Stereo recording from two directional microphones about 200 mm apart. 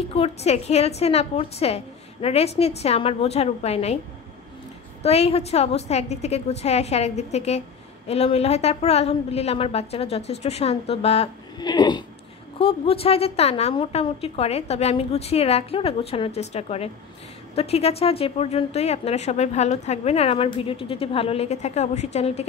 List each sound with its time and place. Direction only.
0.1 s a woman's voice: 30° left (ahead or behind)
5.0 s a woman's voice: 30° left (ahead or behind)